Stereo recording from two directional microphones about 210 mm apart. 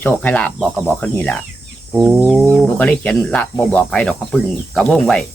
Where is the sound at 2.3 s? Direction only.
5° right (ahead or behind).